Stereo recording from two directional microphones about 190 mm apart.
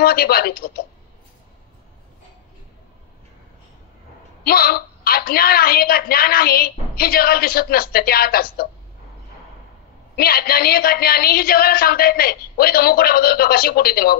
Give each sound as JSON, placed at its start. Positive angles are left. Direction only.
{"t": 0.0, "sound": "a woman's voice", "side_deg": 55}
{"t": 4.5, "sound": "a woman's voice", "side_deg": 55}
{"t": 10.1, "sound": "a woman's voice", "side_deg": 55}